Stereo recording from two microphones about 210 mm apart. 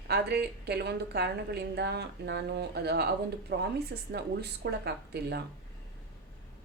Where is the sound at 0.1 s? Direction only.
50° right (ahead or behind).